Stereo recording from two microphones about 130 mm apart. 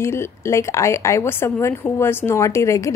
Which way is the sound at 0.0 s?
20° left (ahead or behind).